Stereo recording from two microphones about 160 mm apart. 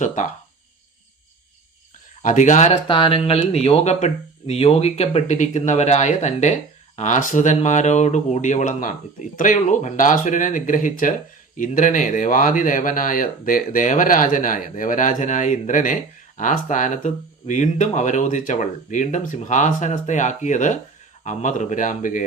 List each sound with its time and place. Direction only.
0.0 s speech: 50° left (ahead or behind)
2.2 s speech: 50° left (ahead or behind)
2.8 s speech: 35° left (ahead or behind); by 22.2 s 55° left (ahead or behind)